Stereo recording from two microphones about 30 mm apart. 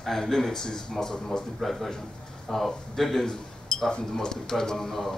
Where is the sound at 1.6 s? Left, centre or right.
Centre.